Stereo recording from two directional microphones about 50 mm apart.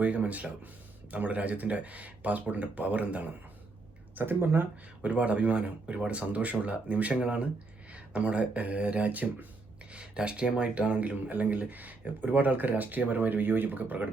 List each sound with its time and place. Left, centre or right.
0.0 s speech: right
4.1 s speech: right
5.0 s speech: right
9.9 s speech: right